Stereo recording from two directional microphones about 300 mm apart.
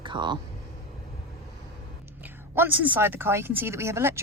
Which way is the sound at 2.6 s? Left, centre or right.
Centre.